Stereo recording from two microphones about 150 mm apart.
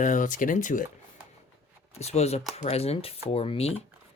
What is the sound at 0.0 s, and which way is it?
Speech, 60° left (ahead or behind).